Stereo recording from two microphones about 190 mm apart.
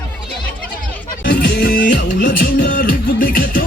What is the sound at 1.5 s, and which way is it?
Music, 50° left (ahead or behind).